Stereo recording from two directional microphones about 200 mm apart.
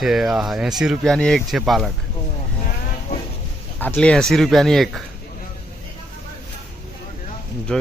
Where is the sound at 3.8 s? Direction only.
5° left (ahead or behind).